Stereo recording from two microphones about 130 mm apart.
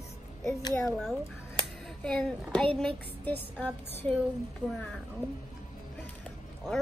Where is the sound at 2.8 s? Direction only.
10° left (ahead or behind).